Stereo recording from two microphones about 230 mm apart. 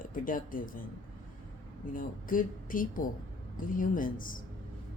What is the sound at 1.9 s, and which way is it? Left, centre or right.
Speech, left.